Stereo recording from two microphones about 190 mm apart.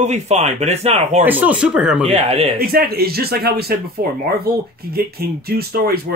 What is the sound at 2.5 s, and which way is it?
Speech, 50° right (ahead or behind).